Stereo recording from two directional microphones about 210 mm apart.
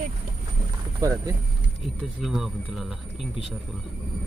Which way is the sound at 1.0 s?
15° right (ahead or behind).